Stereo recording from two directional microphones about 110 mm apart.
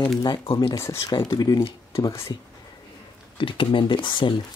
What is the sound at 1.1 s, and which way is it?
Speech, 40° left (ahead or behind).